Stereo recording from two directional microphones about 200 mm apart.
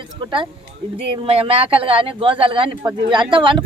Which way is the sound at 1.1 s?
30° right (ahead or behind).